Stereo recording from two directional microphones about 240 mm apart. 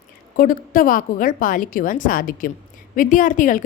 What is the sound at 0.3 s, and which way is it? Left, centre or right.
A woman's voice, left.